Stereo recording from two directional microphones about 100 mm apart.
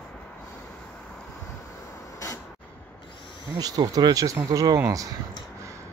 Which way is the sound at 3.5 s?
40° right (ahead or behind).